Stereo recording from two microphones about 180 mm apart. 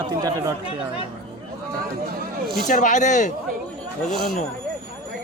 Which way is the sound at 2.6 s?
45° left (ahead or behind).